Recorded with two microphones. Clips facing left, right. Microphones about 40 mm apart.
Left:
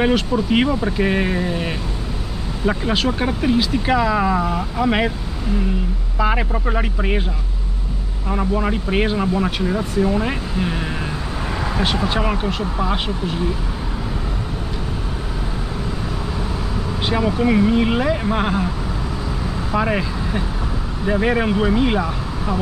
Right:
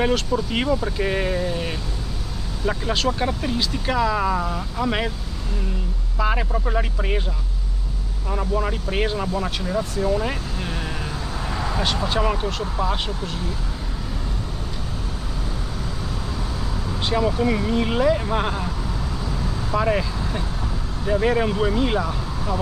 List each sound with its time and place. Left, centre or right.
0.0 s speech: centre
6.1 s speech: centre
8.3 s speech: centre
17.0 s speech: centre
19.7 s speech: centre